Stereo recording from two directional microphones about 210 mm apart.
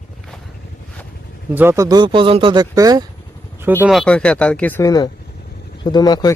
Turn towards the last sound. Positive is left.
turn(degrees=20)  # may be behind; listen again after turning